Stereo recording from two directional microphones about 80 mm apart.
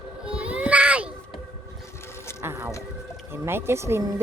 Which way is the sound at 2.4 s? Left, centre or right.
Right.